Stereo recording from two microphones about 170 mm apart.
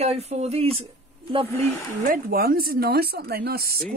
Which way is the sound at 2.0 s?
60° right (ahead or behind).